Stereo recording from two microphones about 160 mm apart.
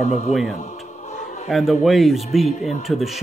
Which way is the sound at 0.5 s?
45° left (ahead or behind).